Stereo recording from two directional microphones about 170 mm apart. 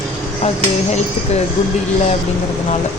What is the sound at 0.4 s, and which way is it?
Speech, 40° left (ahead or behind).